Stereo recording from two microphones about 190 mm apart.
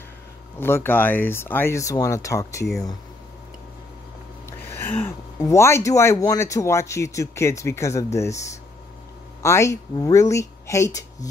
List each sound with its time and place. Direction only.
0.6 s speech: 10° left (ahead or behind)
4.5 s speech: 15° left (ahead or behind)